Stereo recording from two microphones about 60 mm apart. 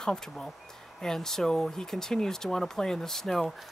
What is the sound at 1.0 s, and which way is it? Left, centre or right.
Speech, centre.